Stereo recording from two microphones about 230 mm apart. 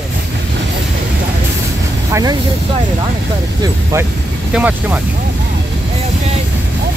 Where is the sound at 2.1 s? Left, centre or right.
Centre.